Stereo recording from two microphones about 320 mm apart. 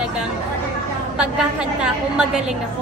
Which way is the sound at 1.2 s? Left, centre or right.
Centre.